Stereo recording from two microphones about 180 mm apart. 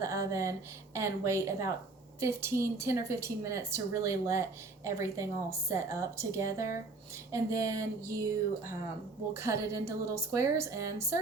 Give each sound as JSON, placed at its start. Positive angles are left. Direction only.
{"t": 0.0, "sound": "a sound", "side_deg": -15}
{"t": 0.9, "sound": "a woman's voice", "side_deg": -15}
{"t": 9.3, "sound": "a woman's voice", "side_deg": -15}